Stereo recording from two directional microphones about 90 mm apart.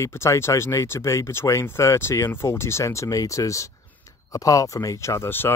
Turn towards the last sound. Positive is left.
turn(degrees=25)  # may be behind; listen again after turning